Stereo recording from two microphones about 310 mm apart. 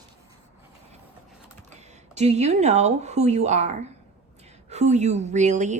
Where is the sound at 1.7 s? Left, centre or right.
Right.